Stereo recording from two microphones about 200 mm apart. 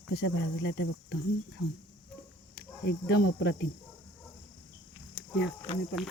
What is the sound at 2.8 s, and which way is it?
Speech, 55° left (ahead or behind).